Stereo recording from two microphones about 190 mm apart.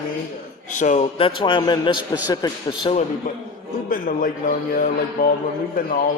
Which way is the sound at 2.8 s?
35° left (ahead or behind).